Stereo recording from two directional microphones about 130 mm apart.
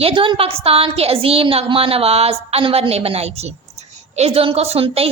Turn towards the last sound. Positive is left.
turn(degrees=-50)  # may be behind; listen again after turning